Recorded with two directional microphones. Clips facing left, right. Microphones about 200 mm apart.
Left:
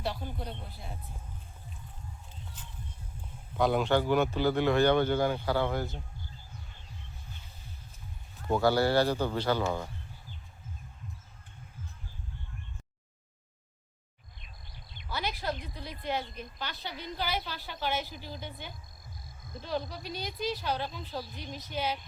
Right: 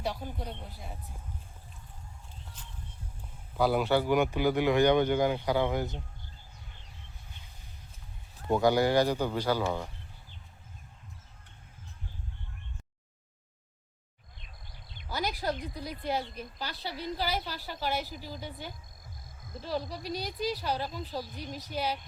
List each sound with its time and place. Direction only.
0.0 s speech: 10° right (ahead or behind)
3.6 s speech: 5° right (ahead or behind)
8.4 s speech: 15° right (ahead or behind)
14.9 s a sound: 40° right (ahead or behind)
15.4 s a woman's voice: 40° right (ahead or behind)
19.5 s speech: 5° right (ahead or behind)
19.9 s a woman's voice: 35° right (ahead or behind)
20.7 s speech: 5° right (ahead or behind)
21.3 s a woman's voice: 40° right (ahead or behind)